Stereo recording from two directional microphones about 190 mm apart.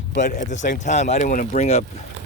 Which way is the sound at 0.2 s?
40° left (ahead or behind).